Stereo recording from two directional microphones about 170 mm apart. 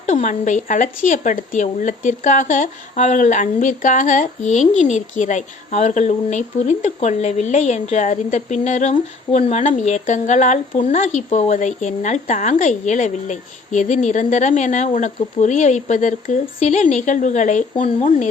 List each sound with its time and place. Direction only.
0.0 s a woman's voice: 45° left (ahead or behind)